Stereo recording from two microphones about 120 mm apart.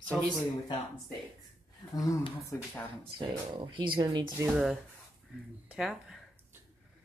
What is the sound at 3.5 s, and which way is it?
Speech, 40° right (ahead or behind).